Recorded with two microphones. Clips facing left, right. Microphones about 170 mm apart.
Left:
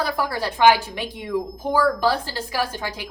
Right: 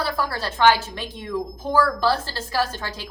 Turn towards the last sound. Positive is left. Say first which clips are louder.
# even
turn(degrees=15)  # may be behind; listen again after turning